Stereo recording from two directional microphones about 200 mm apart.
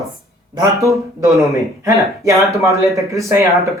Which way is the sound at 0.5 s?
15° right (ahead or behind).